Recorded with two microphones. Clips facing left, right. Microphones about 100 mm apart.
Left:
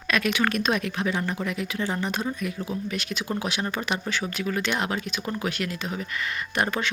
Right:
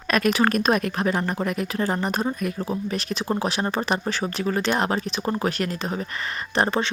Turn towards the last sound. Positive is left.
turn(degrees=-30)  # may be behind; listen again after turning